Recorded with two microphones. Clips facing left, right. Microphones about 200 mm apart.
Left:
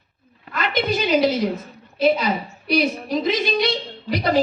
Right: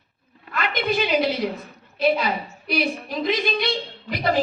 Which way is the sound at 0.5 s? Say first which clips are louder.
Left 2 dB; 45° left (ahead or behind).